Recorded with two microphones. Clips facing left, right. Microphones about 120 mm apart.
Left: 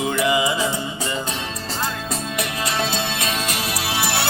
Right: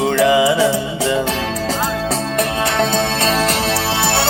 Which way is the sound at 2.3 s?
60° right (ahead or behind).